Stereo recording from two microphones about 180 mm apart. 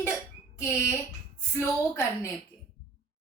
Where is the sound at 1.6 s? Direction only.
15° left (ahead or behind).